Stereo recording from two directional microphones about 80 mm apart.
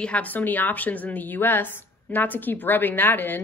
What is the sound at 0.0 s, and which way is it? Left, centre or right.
A woman's voice, centre.